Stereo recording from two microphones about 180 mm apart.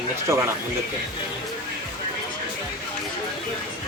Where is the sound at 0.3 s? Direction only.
15° right (ahead or behind).